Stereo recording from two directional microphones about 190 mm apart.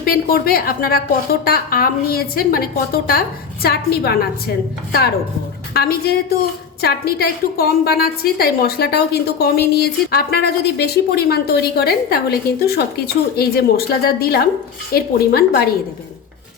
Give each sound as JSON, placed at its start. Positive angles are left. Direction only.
{"t": 0.0, "sound": "a woman's voice", "side_deg": 50}
{"t": 5.7, "sound": "a woman's voice", "side_deg": 55}